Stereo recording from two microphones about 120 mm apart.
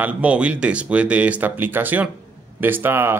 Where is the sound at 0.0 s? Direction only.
10° right (ahead or behind).